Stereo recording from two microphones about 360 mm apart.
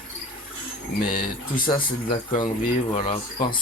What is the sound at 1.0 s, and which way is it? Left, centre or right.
Speech, left.